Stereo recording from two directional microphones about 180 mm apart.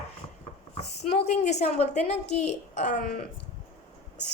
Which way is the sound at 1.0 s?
40° left (ahead or behind).